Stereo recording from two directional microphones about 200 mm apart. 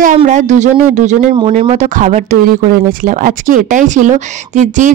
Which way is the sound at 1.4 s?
25° right (ahead or behind).